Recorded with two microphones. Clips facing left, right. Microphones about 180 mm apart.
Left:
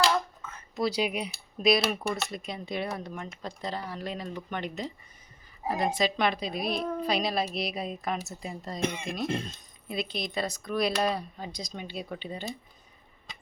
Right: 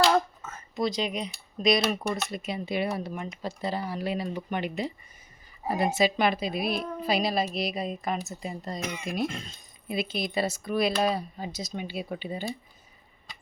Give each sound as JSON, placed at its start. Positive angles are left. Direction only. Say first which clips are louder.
{"t": 0.1, "sound": "a sound", "louder": "right 5 dB", "side_deg": -45}
{"t": 0.8, "sound": "a woman's voice", "louder": "even", "side_deg": 10}
{"t": 8.8, "sound": "speech", "louder": "left 6 dB", "side_deg": 30}
{"t": 9.9, "sound": "a woman's voice", "louder": "right 3 dB", "side_deg": -5}